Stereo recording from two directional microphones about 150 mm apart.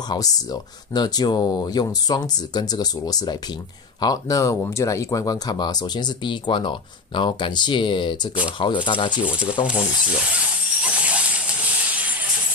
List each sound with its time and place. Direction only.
0.1 s speech: 25° left (ahead or behind)
9.1 s speech: 10° right (ahead or behind)
9.7 s a sound: 5° right (ahead or behind)